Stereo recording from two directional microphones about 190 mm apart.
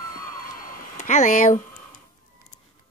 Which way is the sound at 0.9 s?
40° left (ahead or behind).